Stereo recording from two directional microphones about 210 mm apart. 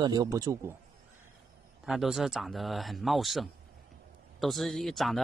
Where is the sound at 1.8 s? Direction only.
Centre (ahead or behind).